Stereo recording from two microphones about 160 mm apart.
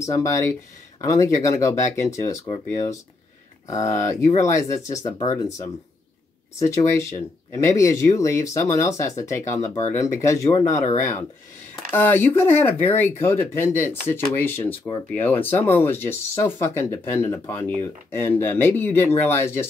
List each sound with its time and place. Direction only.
0.0 s speech: 20° left (ahead or behind)